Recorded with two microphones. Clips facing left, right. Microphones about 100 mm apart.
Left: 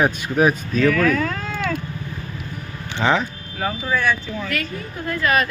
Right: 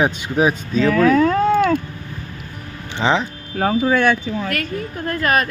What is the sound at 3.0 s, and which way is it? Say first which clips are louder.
Speech: right 1 dB; 20° right (ahead or behind).